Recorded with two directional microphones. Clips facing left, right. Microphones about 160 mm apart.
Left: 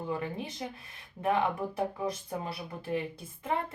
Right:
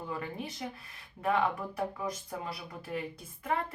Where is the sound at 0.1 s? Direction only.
20° left (ahead or behind).